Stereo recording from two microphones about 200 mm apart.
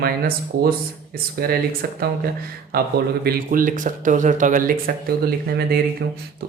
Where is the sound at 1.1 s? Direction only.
45° right (ahead or behind).